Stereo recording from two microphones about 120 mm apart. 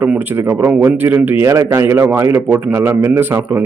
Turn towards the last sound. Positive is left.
turn(degrees=-20)  # may be behind; listen again after turning